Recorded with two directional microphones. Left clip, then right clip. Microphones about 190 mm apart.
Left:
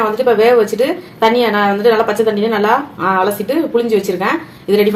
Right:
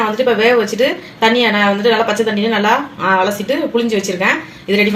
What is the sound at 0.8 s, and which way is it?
A woman's voice, 20° left (ahead or behind).